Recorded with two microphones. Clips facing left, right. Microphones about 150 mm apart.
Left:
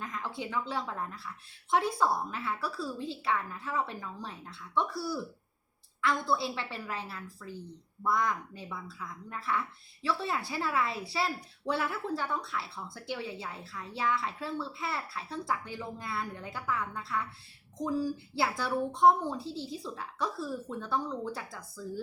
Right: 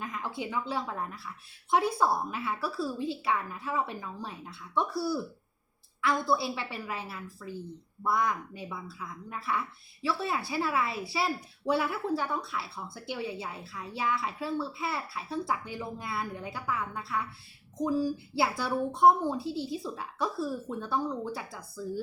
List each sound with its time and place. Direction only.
0.0 s a sound: 10° right (ahead or behind)
0.7 s a woman's voice: 10° right (ahead or behind)
6.0 s a woman's voice: 10° right (ahead or behind)